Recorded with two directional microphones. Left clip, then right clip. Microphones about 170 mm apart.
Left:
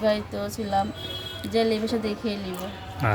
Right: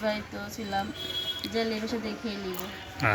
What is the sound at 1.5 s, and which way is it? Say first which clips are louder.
Speech: left 9 dB; 35° left (ahead or behind).